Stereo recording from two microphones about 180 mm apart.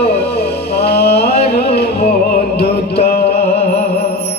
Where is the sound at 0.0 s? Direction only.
60° left (ahead or behind).